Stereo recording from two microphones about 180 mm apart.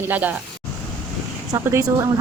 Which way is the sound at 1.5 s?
20° right (ahead or behind).